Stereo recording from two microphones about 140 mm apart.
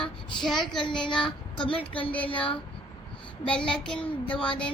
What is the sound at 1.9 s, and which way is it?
Child singing, 10° left (ahead or behind).